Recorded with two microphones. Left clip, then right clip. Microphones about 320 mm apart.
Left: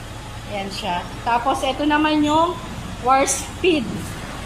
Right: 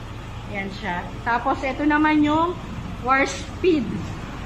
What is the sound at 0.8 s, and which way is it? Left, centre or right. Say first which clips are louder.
A woman's voice: left 3 dB; centre.